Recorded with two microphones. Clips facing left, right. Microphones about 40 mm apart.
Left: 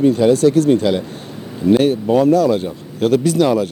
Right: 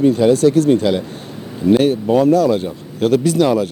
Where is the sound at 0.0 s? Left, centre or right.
Centre.